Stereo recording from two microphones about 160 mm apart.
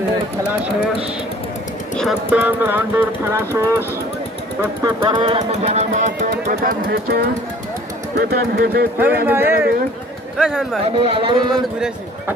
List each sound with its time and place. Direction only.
2.0 s speech: 5° right (ahead or behind)
4.8 s speech: 30° right (ahead or behind); by 6.2 s 50° right (ahead or behind)
6.3 s speech: 70° right (ahead or behind)
8.2 s speech: 70° right (ahead or behind)
9.2 s speech: 10° right (ahead or behind)
10.3 s speech: centre (ahead or behind)
10.9 s speech: 35° right (ahead or behind)